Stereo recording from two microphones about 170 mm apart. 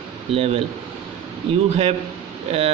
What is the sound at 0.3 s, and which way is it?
Speech, 35° right (ahead or behind).